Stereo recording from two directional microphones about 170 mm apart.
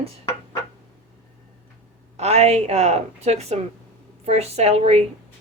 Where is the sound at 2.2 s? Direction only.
40° right (ahead or behind).